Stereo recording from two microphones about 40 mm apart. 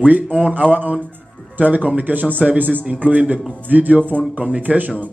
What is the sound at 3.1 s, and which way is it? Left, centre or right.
Speech, right.